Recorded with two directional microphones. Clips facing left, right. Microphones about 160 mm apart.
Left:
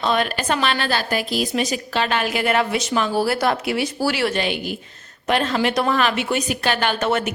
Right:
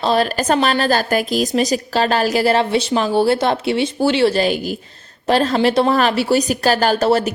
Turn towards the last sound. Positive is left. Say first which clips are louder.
# right 6 dB
turn(degrees=-35)  # may be behind; listen again after turning